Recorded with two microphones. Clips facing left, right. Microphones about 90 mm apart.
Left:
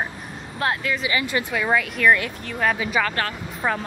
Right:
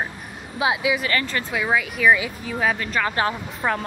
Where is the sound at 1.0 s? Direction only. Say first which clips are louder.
Even; 15° left (ahead or behind).